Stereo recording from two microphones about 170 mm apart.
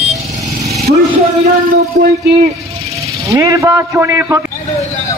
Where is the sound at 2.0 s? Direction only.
60° right (ahead or behind).